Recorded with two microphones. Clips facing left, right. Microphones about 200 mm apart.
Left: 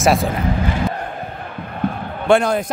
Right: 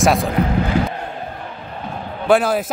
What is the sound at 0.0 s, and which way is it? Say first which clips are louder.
Speech: even; centre (ahead or behind).